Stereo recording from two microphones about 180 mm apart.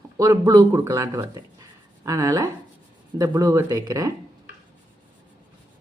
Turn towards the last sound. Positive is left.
turn(degrees=-20)  # may be behind; listen again after turning